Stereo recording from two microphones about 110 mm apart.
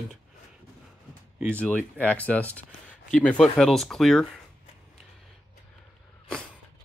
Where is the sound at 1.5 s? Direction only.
10° left (ahead or behind).